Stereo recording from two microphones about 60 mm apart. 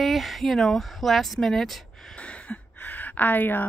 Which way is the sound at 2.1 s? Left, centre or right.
Centre.